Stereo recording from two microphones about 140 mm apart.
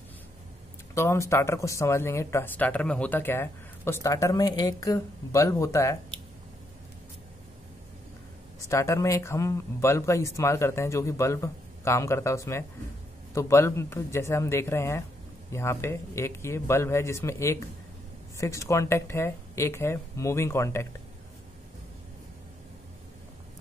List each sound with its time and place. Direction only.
0.9 s speech: 20° left (ahead or behind)
8.6 s speech: 20° left (ahead or behind)